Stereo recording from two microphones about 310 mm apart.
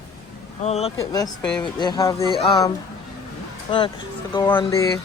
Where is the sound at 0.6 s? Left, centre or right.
Centre.